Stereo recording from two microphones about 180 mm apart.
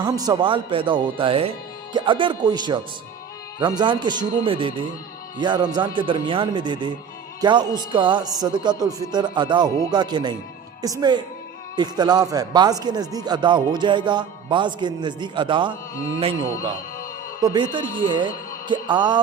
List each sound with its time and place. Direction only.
0.0 s speech: 20° right (ahead or behind)
17.4 s speech: 25° right (ahead or behind)